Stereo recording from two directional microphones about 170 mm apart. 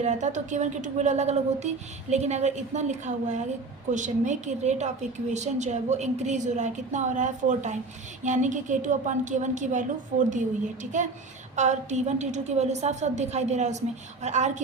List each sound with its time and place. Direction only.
0.0 s a woman's voice: 45° right (ahead or behind)